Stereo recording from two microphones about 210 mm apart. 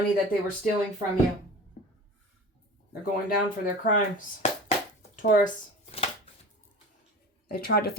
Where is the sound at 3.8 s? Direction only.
40° left (ahead or behind).